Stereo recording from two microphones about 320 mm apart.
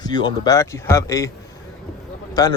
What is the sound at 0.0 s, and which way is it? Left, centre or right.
Speech, centre.